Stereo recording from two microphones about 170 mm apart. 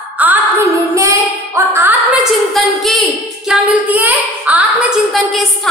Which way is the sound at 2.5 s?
Centre (ahead or behind).